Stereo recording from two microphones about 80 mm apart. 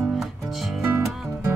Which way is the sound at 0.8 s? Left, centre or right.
Right.